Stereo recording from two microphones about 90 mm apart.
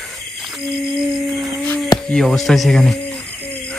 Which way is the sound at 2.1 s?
5° left (ahead or behind).